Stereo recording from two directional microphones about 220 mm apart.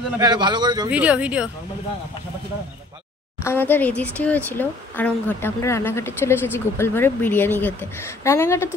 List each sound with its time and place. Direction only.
0.2 s a man's voice: 20° right (ahead or behind)
0.8 s speech: 5° right (ahead or behind)
3.4 s speech: 10° left (ahead or behind)